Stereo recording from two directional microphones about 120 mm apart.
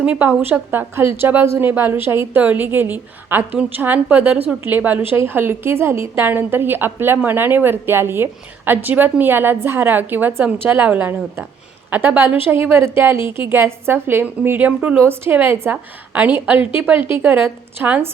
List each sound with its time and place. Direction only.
0.0 s a woman's voice: 15° right (ahead or behind)